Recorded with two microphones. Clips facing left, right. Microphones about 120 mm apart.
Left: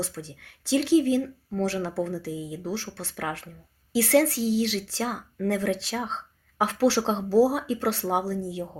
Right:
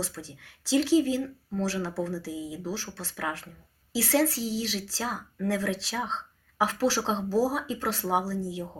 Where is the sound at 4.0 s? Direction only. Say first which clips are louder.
Left 4 dB; 60° left (ahead or behind).